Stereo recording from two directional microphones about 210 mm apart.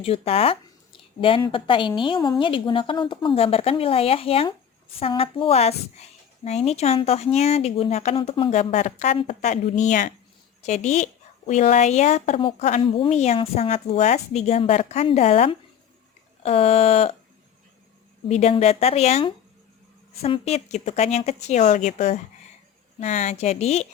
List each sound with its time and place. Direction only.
0.0 s a woman's voice: 30° left (ahead or behind)
18.3 s a woman's voice: 30° left (ahead or behind)